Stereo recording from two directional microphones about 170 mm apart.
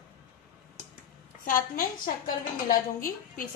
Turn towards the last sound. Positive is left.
turn(degrees=55)  # may be behind; listen again after turning